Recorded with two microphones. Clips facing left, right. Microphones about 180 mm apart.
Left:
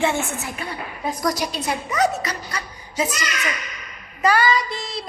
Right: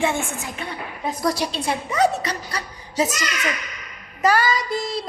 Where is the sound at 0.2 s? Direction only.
15° right (ahead or behind).